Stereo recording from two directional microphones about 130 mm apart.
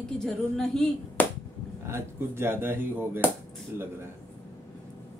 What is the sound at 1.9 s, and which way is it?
Speech, 20° right (ahead or behind).